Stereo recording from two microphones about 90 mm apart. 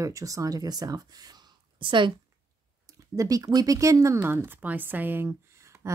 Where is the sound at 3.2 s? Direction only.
40° right (ahead or behind).